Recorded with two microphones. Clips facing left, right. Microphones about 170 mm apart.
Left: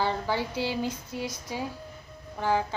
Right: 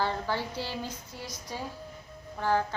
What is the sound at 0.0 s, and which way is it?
A woman's voice, 15° left (ahead or behind).